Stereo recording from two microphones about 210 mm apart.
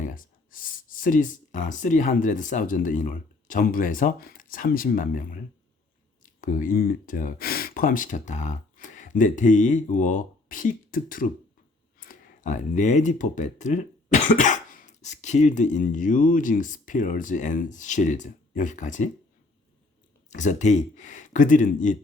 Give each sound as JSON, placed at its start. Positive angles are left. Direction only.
{"t": 0.0, "sound": "speech", "side_deg": 40}
{"t": 20.3, "sound": "speech", "side_deg": 35}